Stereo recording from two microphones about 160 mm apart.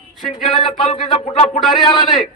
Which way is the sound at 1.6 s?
Centre (ahead or behind).